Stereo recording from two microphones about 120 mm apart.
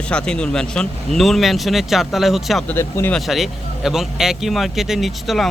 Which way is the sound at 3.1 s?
Centre (ahead or behind).